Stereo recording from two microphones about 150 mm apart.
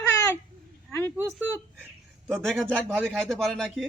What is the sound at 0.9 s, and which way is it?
Speech, 15° left (ahead or behind).